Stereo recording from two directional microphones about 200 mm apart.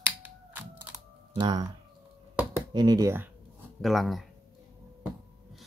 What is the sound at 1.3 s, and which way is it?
Speech, 20° right (ahead or behind).